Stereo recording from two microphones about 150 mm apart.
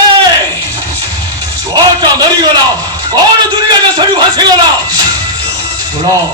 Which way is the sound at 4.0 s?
30° right (ahead or behind).